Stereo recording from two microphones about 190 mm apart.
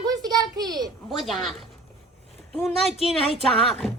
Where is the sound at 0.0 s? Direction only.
20° right (ahead or behind).